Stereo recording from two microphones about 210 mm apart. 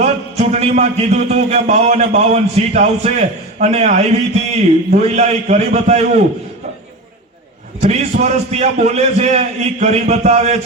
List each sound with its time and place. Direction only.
0.0 s speech: 30° right (ahead or behind)
7.8 s speech: 30° right (ahead or behind)